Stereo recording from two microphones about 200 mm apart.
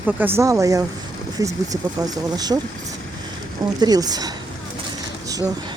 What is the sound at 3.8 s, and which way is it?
Speech, 20° right (ahead or behind).